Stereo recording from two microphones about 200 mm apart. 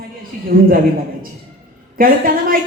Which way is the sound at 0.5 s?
45° right (ahead or behind).